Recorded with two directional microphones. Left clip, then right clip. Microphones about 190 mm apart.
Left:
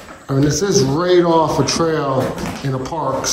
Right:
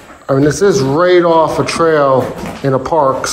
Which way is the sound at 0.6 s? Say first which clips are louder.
Right 6 dB; 15° left (ahead or behind).